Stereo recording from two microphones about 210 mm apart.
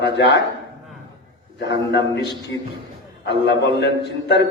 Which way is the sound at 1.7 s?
55° left (ahead or behind).